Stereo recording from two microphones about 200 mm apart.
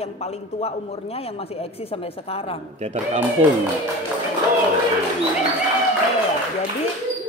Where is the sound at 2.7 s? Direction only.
35° right (ahead or behind).